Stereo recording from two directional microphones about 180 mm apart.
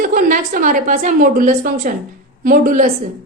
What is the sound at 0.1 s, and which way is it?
A woman's voice, 50° right (ahead or behind).